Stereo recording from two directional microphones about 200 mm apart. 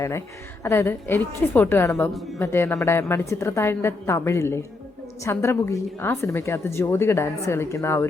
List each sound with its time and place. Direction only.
0.0 s a woman's voice: 15° left (ahead or behind)